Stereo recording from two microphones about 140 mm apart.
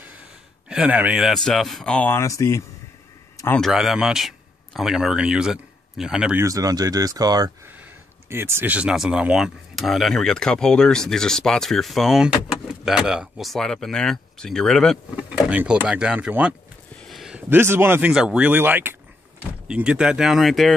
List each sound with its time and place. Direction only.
0.7 s speech: 10° right (ahead or behind); by 2.6 s 20° left (ahead or behind)
3.5 s speech: centre (ahead or behind)
6.3 s speech: 25° right (ahead or behind)
7.6 s speech: 15° right (ahead or behind); by 15.0 s 5° left (ahead or behind)
15.2 s speech: 10° right (ahead or behind)
16.9 s a sound: 5° left (ahead or behind)
17.5 s speech: 15° right (ahead or behind); by 20.7 s centre (ahead or behind)